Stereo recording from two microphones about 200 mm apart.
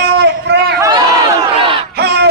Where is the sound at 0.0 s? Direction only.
60° right (ahead or behind).